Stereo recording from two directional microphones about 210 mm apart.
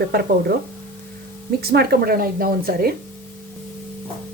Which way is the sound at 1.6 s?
50° right (ahead or behind).